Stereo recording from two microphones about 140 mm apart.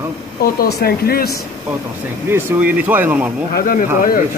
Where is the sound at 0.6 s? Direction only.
90° left.